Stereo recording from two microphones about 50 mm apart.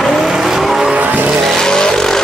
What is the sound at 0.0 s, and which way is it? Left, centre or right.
Vehicle, centre.